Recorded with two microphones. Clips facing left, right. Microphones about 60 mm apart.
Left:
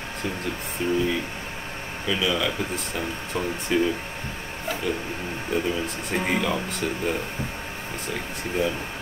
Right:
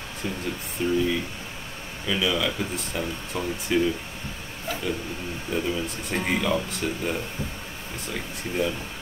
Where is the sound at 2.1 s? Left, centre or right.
Centre.